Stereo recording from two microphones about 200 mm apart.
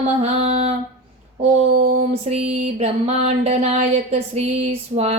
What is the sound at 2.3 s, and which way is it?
Speech, 30° right (ahead or behind).